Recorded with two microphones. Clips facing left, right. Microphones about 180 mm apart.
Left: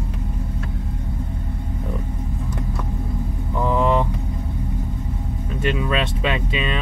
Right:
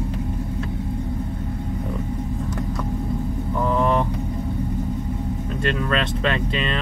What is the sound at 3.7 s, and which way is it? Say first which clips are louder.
Vehicle: left 2 dB; 15° left (ahead or behind).